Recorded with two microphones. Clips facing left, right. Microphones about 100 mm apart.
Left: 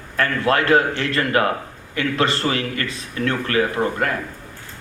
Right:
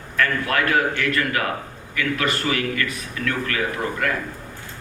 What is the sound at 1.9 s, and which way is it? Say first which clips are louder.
A man's voice: left 3 dB; 30° left (ahead or behind).